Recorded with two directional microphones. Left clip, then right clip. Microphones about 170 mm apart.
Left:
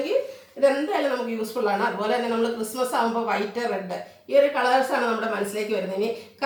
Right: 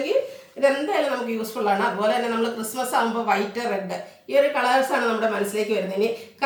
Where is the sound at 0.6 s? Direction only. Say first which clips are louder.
Right 1 dB; 20° right (ahead or behind).